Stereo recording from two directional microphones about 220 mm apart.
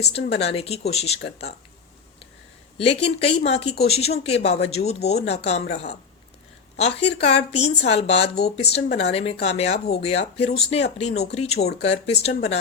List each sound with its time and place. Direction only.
0.0 s speech: 30° left (ahead or behind)
2.7 s speech: 25° left (ahead or behind)